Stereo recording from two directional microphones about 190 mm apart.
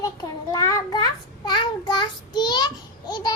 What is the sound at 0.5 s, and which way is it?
Child singing, 20° left (ahead or behind).